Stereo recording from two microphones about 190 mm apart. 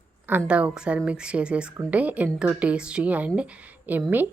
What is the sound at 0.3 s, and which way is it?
A woman's voice, 10° right (ahead or behind).